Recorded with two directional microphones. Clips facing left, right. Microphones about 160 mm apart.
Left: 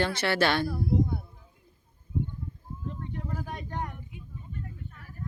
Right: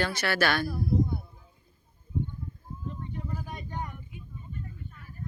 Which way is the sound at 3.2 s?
75° left (ahead or behind).